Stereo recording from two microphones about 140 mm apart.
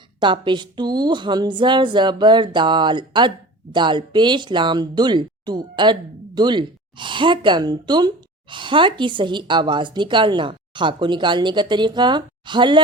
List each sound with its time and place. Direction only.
0.2 s speech: 35° right (ahead or behind)